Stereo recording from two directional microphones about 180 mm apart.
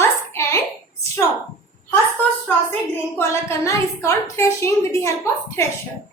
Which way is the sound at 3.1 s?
15° left (ahead or behind).